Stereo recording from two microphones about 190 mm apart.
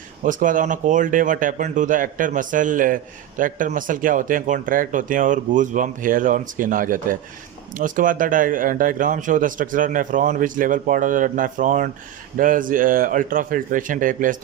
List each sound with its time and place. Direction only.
0.3 s speech: 45° right (ahead or behind)